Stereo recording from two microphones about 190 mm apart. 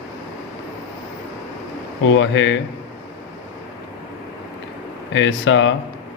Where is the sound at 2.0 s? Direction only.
75° left (ahead or behind).